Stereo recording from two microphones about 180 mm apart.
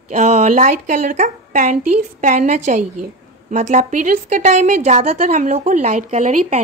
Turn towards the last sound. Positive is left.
turn(degrees=-45)  # may be behind; listen again after turning